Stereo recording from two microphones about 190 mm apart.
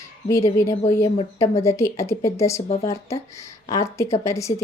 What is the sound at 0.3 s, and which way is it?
A woman's voice, 15° left (ahead or behind).